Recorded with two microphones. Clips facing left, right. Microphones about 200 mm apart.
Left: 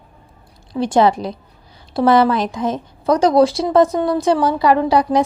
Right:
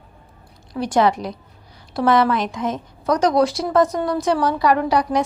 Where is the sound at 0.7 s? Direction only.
25° left (ahead or behind).